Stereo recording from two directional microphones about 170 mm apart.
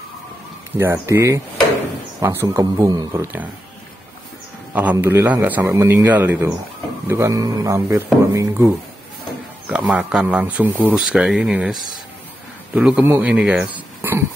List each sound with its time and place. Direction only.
0.7 s speech: 15° right (ahead or behind)
4.9 s speech: 10° right (ahead or behind)
9.7 s speech: 10° right (ahead or behind)